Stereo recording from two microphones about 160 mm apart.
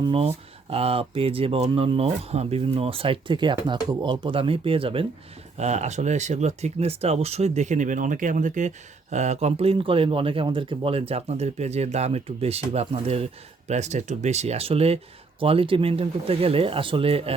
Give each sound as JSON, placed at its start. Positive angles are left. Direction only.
{"t": 0.0, "sound": "speech", "side_deg": -35}
{"t": 5.5, "sound": "speech", "side_deg": -45}